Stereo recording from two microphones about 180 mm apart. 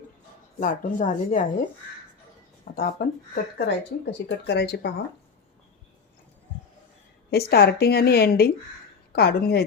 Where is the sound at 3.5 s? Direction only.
70° left (ahead or behind).